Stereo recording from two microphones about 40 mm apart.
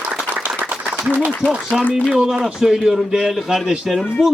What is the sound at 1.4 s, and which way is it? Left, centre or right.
Speech, left.